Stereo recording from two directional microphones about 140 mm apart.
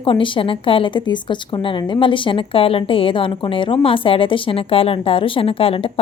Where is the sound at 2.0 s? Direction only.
35° left (ahead or behind).